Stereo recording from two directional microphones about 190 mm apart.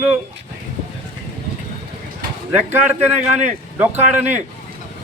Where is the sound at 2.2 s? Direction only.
45° right (ahead or behind).